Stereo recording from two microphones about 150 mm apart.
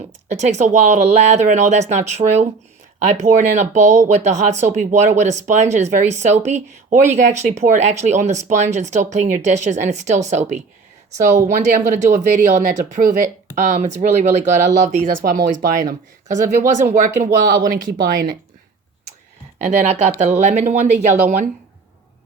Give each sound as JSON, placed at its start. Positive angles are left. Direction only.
{"t": 0.3, "sound": "speech", "side_deg": -50}
{"t": 15.2, "sound": "speech", "side_deg": -75}
{"t": 15.8, "sound": "speech", "side_deg": -60}
{"t": 19.5, "sound": "speech", "side_deg": -50}